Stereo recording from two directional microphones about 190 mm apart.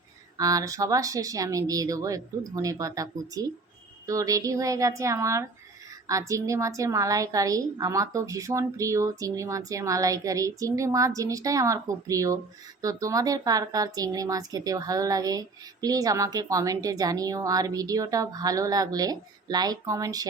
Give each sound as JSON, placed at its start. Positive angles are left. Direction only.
{"t": 0.3, "sound": "a woman's voice", "side_deg": -20}